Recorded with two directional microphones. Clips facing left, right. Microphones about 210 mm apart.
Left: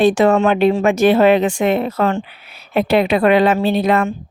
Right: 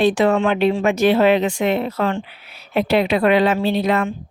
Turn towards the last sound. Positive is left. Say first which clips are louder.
# left 3 dB
turn(degrees=50)  # may be behind; listen again after turning